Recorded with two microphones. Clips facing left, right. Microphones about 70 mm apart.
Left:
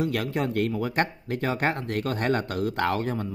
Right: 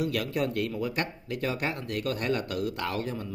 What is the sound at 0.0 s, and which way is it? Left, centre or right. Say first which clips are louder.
A man's voice: left 2 dB; left.